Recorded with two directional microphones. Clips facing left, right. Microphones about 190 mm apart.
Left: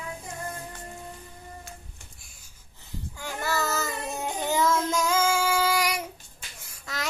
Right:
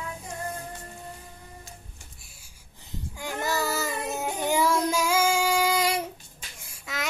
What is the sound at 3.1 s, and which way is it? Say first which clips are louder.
Child singing: right 1 dB; 15° right (ahead or behind).